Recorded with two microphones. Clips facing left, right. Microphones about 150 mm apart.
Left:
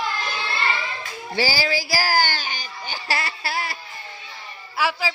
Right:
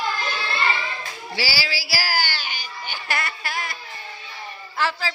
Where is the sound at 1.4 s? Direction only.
45° left (ahead or behind).